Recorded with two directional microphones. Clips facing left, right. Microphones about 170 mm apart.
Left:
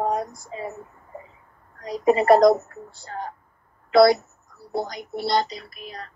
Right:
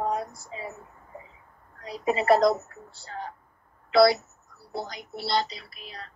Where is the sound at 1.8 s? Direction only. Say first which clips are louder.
Left 6 dB; 50° left (ahead or behind).